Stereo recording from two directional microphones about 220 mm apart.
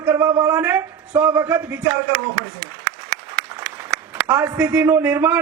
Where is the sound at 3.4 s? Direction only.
5° right (ahead or behind).